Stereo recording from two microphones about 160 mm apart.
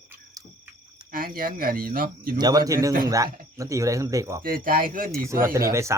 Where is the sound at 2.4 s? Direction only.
25° right (ahead or behind).